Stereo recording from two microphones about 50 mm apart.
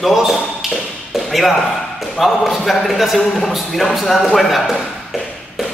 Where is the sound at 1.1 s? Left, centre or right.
Centre.